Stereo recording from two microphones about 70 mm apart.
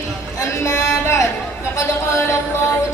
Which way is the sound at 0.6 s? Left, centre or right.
Left.